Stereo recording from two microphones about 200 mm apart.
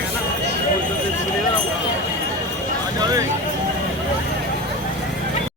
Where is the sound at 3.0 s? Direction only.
15° right (ahead or behind).